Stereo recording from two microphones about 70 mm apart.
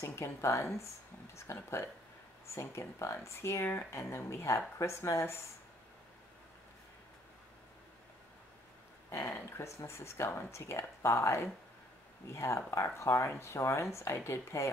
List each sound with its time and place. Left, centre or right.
0.0 s speech: left
9.1 s speech: left